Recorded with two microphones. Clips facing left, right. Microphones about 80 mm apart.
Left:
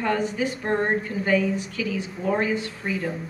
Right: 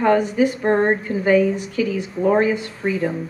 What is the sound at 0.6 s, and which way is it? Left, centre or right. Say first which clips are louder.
Speech: right 6 dB; right.